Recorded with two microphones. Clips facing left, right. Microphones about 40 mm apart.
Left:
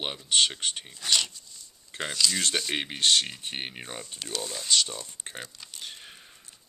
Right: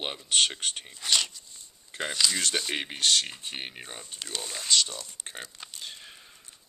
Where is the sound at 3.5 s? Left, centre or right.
Centre.